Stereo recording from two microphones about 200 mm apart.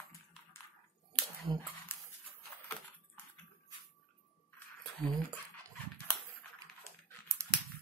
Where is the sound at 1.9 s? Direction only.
10° left (ahead or behind).